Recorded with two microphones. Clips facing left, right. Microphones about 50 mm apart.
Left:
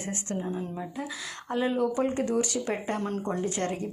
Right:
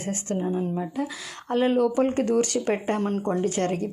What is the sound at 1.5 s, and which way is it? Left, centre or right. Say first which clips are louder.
Speech: right 6 dB; right.